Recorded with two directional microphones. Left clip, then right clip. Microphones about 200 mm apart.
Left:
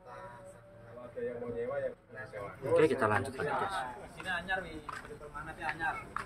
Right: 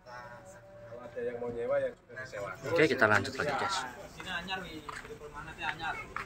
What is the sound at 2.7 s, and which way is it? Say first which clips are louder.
A man's voice: right 2 dB; 5° right (ahead or behind).